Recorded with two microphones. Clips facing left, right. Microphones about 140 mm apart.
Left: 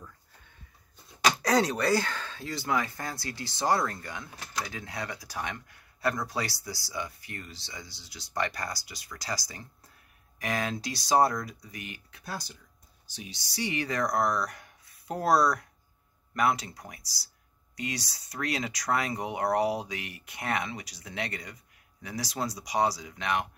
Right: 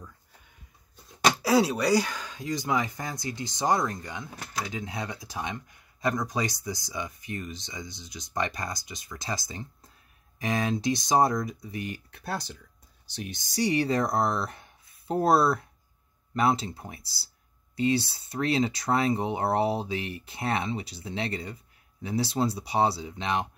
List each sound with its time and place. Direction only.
1.4 s speech: 5° right (ahead or behind); by 11.8 s 20° right (ahead or behind)
12.1 s speech: 60° right (ahead or behind); by 23.5 s 25° right (ahead or behind)